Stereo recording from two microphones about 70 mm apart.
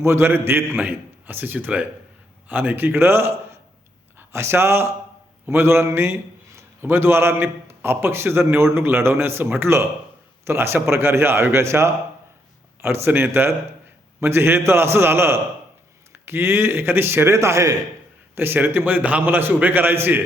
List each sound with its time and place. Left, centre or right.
0.0 s a man's voice: right
18.3 s a man's voice: right